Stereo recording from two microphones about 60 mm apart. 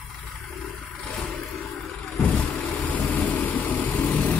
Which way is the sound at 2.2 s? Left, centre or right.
Left.